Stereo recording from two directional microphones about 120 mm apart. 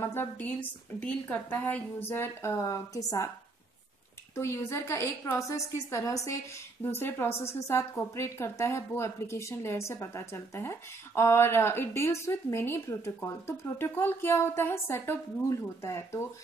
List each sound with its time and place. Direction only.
0.0 s a woman's voice: 20° left (ahead or behind)
4.4 s a woman's voice: 25° left (ahead or behind)